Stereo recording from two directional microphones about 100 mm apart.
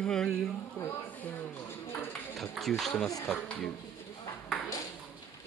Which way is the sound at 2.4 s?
Centre (ahead or behind).